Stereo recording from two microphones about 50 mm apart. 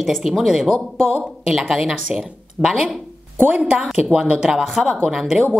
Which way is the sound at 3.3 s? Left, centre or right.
Right.